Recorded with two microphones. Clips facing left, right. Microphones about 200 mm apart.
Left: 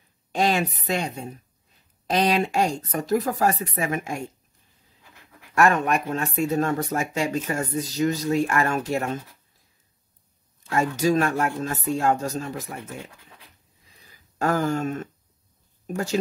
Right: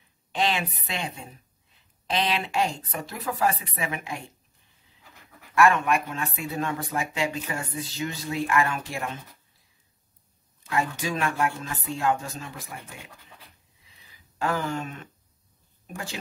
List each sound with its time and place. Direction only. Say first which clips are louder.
0.3 s speech: left 4 dB; 45° left (ahead or behind)
5.5 s speech: left 1 dB; 40° left (ahead or behind)
10.7 s speech: left 6 dB; 40° left (ahead or behind)
13.8 s a sound: left 3 dB; 45° left (ahead or behind)
15.9 s speech: left 11 dB; 40° left (ahead or behind)